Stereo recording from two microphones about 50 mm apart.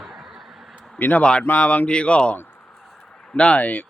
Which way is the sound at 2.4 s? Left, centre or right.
Left.